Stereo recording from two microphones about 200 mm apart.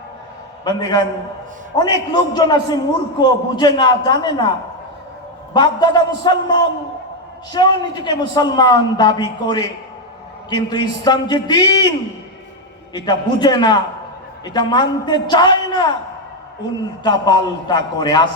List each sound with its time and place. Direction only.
0.6 s a man's voice: 20° left (ahead or behind)
5.5 s a man's voice: 20° left (ahead or behind)
13.1 s a man's voice: 20° left (ahead or behind)
17.0 s a man's voice: 20° left (ahead or behind)